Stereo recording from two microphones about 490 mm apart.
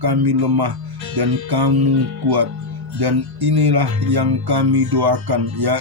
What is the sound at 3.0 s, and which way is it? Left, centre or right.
Speech, right.